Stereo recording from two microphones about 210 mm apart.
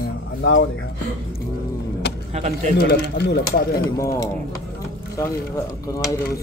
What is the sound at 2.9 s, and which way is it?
Speech, 50° left (ahead or behind).